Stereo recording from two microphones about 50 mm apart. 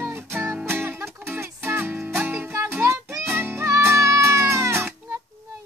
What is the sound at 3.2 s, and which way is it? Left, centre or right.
Music, right.